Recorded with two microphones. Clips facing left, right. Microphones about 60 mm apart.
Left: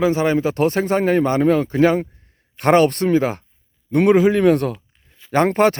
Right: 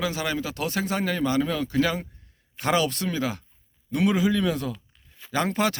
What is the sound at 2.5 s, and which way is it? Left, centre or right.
Speech, left.